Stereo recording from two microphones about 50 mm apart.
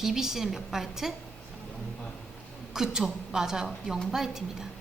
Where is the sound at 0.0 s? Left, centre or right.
Centre.